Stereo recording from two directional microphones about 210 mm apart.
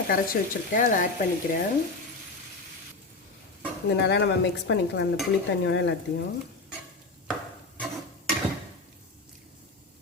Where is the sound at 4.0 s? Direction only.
55° left (ahead or behind).